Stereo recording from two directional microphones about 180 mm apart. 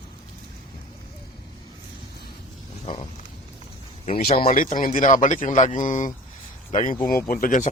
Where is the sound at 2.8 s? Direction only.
25° left (ahead or behind).